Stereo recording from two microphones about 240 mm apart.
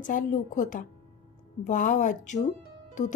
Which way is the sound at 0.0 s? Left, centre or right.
Left.